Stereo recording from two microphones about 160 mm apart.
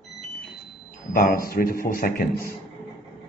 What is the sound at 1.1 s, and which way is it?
A man's voice, 65° left (ahead or behind).